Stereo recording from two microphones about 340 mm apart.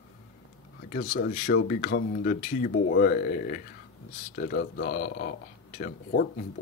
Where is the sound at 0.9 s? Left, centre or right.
Left.